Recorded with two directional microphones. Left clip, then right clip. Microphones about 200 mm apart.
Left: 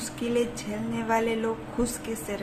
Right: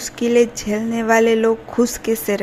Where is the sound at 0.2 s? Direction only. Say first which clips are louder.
Right 12 dB; 35° right (ahead or behind).